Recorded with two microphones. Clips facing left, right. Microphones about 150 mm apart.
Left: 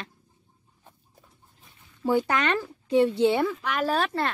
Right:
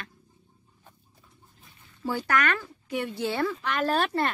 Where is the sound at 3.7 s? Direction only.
Centre (ahead or behind).